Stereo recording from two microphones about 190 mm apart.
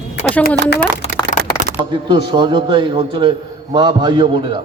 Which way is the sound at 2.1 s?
25° right (ahead or behind).